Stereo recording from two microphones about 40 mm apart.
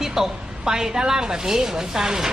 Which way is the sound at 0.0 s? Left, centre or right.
Centre.